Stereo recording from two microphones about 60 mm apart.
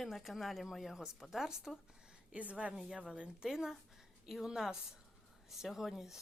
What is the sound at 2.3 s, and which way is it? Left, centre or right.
A woman's voice, right.